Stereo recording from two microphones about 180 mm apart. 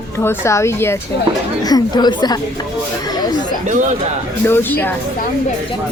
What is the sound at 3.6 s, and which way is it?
Speech, 45° right (ahead or behind).